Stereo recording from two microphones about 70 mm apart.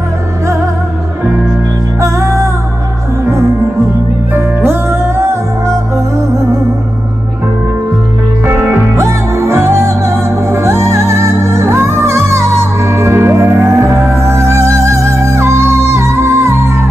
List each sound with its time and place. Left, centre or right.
2.0 s music: right
4.3 s music: right
8.5 s music: right